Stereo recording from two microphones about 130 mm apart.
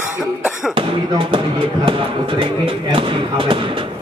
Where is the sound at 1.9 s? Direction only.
45° right (ahead or behind).